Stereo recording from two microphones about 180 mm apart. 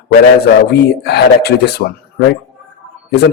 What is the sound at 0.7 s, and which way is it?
Speech, 65° left (ahead or behind).